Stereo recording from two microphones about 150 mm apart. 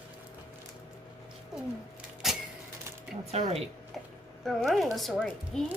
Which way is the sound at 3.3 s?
45° right (ahead or behind).